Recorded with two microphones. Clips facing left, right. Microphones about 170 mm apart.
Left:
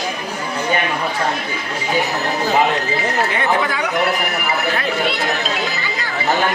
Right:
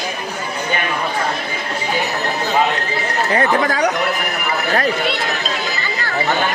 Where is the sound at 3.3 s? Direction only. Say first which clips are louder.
Right 2 dB; 40° right (ahead or behind).